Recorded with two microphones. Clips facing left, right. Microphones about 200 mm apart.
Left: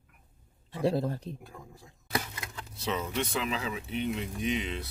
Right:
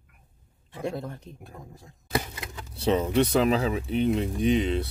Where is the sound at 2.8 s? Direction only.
30° right (ahead or behind).